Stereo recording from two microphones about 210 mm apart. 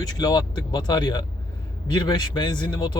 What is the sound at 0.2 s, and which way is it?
Speech, 20° left (ahead or behind).